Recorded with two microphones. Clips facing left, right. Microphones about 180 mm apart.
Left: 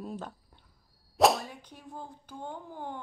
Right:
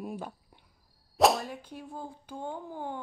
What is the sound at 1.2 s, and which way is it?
Whip, centre (ahead or behind).